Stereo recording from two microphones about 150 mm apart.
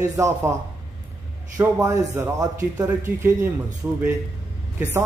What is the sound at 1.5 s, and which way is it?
A man's voice, 20° right (ahead or behind).